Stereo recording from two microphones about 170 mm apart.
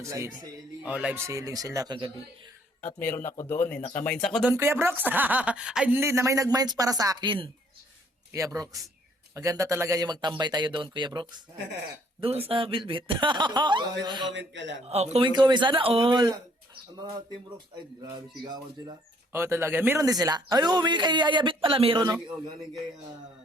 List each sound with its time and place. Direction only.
0.0 s speech: 20° right (ahead or behind)
0.8 s speech: 5° right (ahead or behind); by 2.1 s 30° right (ahead or behind)
2.8 s speech: 10° left (ahead or behind)
3.8 s speech: 45° left (ahead or behind)
4.0 s speech: 5° left (ahead or behind)
4.4 s speech: 15° right (ahead or behind)
14.3 s a man's voice: 90° right
14.8 s a man's voice: 40° right (ahead or behind)
15.3 s speech: 25° right (ahead or behind)
19.3 s speech: 15° right (ahead or behind)